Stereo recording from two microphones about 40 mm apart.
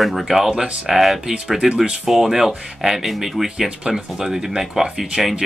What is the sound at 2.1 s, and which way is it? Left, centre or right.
Speech, centre.